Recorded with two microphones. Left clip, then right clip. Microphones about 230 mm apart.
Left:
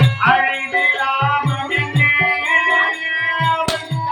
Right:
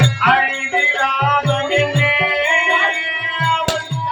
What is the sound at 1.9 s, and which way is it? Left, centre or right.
Music, right.